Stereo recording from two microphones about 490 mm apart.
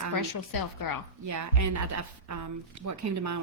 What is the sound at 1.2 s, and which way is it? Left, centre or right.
A woman's voice, right.